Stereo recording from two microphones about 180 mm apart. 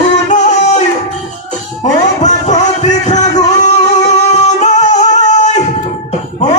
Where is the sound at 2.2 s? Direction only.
40° left (ahead or behind).